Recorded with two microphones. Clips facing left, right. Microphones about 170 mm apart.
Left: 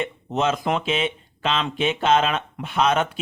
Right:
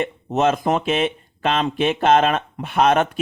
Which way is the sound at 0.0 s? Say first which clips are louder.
Right 4 dB; 45° right (ahead or behind).